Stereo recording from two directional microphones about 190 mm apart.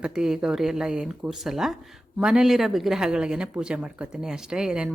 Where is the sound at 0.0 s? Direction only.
5° right (ahead or behind).